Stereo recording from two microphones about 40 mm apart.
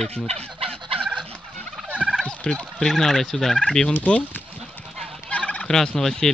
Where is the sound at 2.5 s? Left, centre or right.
Centre.